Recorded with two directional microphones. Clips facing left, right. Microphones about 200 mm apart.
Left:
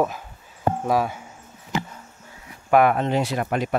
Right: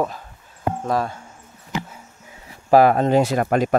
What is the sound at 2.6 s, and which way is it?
Speech, 35° right (ahead or behind).